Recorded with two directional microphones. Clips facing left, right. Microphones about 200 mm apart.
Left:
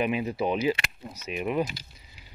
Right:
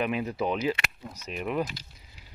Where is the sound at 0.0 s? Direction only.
5° left (ahead or behind).